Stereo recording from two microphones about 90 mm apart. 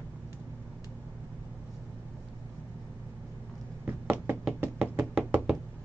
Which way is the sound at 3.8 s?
25° right (ahead or behind).